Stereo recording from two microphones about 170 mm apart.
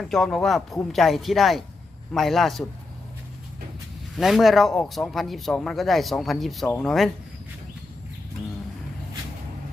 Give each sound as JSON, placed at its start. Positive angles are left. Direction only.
{"t": 0.0, "sound": "speech", "side_deg": 0}
{"t": 4.2, "sound": "speech", "side_deg": 0}